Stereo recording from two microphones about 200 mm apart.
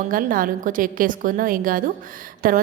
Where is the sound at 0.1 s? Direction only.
45° right (ahead or behind).